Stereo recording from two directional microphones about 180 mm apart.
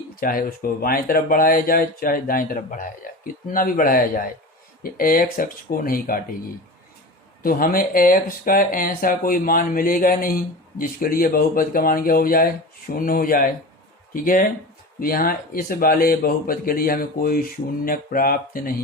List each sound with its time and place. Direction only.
0.2 s speech: 50° left (ahead or behind)
7.4 s speech: 55° left (ahead or behind)